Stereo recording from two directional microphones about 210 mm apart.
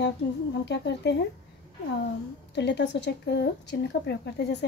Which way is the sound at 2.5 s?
55° left (ahead or behind).